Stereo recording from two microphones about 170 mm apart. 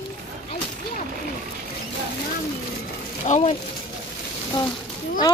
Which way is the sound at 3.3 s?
40° left (ahead or behind).